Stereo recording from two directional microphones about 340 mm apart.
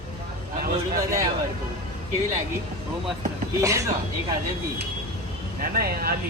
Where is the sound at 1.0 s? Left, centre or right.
Centre.